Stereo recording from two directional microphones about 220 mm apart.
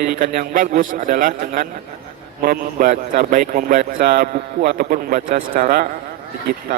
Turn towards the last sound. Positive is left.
turn(degrees=-40)  # may be behind; listen again after turning